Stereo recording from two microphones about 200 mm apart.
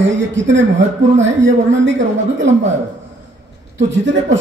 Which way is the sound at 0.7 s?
35° right (ahead or behind).